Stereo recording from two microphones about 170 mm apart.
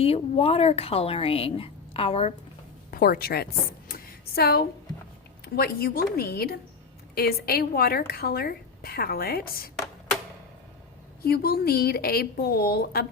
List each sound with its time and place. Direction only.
0.0 s a woman's voice: 35° left (ahead or behind)
2.9 s a woman's voice: 60° left (ahead or behind)
11.2 s a woman's voice: 65° left (ahead or behind)